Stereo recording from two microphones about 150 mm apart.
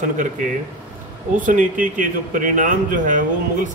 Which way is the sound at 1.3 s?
60° right (ahead or behind).